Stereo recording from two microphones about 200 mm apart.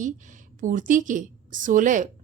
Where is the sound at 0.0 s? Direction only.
40° right (ahead or behind).